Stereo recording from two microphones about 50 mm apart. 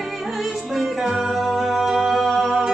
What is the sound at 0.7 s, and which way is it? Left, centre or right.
Music, centre.